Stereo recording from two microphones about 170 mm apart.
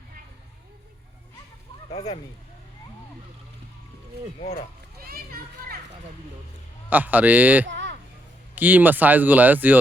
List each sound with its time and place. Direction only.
1.9 s speech: 35° left (ahead or behind)
4.4 s speech: 40° left (ahead or behind)
5.0 s children playing: 60° right (ahead or behind)
6.9 s speech: 10° right (ahead or behind)
7.7 s a sound: 90° right
8.5 s speech: 10° right (ahead or behind)